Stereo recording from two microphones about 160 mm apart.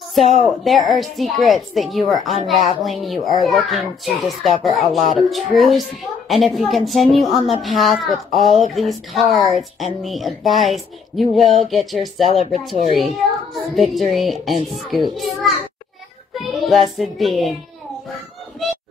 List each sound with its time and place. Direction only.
0.2 s speech: 45° left (ahead or behind)
0.5 s a woman's voice: centre (ahead or behind)
12.3 s speech: 45° left (ahead or behind)
13.7 s a woman's voice: centre (ahead or behind)
16.3 s child singing: centre (ahead or behind)
17.0 s a woman's voice: centre (ahead or behind)
18.6 s a sound: centre (ahead or behind)